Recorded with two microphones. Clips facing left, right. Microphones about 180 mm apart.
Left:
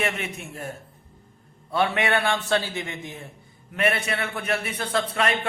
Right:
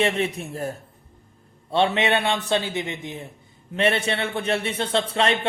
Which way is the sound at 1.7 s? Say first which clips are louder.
Right 2 dB; 25° right (ahead or behind).